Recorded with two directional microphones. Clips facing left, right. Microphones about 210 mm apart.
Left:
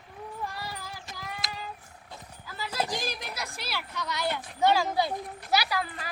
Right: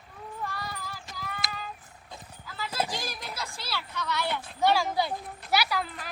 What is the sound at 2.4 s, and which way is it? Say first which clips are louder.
Clip-clop: even; 10° left (ahead or behind).